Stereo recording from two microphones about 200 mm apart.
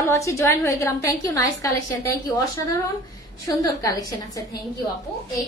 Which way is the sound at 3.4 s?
15° left (ahead or behind).